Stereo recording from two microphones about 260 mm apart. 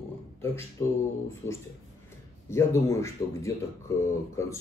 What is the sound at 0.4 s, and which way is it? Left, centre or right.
Speech, centre.